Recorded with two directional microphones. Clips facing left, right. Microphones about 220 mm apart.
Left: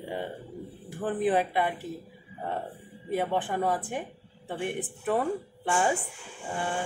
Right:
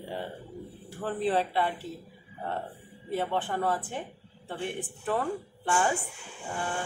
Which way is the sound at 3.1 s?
15° left (ahead or behind).